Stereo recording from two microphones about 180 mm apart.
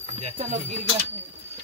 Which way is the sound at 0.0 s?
40° right (ahead or behind).